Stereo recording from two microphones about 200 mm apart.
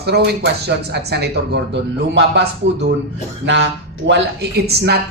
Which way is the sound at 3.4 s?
65° right (ahead or behind).